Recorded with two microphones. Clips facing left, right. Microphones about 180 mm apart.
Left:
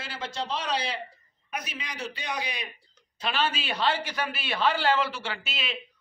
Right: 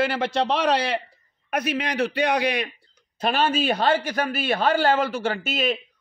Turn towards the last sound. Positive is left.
turn(degrees=-45)  # may be behind; listen again after turning